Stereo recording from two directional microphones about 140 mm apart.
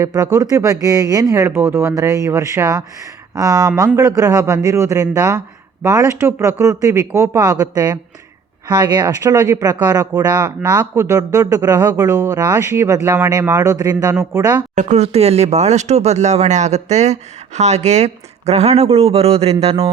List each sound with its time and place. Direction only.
0.0 s speech: 25° right (ahead or behind)
14.8 s speech: 55° right (ahead or behind)